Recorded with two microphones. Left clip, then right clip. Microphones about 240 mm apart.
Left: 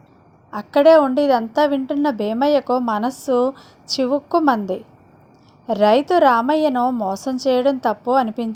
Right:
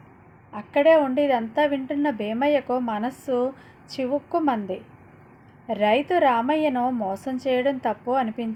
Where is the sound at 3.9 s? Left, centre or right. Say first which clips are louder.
Left 7 dB; left.